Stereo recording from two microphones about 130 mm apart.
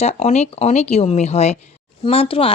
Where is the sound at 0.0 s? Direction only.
55° left (ahead or behind).